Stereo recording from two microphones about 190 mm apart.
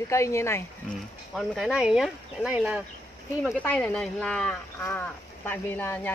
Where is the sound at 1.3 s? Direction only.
Centre (ahead or behind).